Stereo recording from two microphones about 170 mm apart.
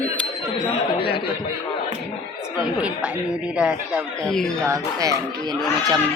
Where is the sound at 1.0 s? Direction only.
35° left (ahead or behind).